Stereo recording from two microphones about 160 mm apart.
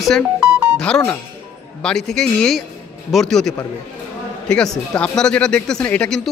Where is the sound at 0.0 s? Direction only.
5° right (ahead or behind).